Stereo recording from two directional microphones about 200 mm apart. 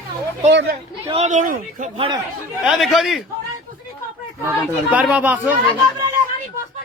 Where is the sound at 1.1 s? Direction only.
35° right (ahead or behind).